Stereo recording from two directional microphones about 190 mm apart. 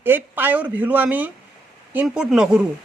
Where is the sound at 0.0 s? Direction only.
10° right (ahead or behind).